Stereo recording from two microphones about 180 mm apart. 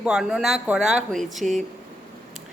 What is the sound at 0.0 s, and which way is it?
Speech, 5° right (ahead or behind).